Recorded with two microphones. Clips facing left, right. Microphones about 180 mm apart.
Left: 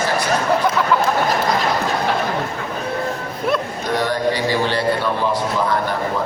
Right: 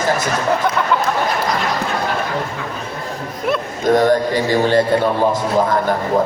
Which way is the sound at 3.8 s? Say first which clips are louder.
Right 9 dB; 45° right (ahead or behind).